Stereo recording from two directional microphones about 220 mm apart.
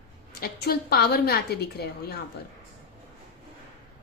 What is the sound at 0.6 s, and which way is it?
A woman's voice, 45° left (ahead or behind).